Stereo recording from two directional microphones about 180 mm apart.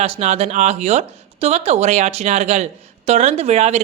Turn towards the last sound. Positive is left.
turn(degrees=-40)  # may be behind; listen again after turning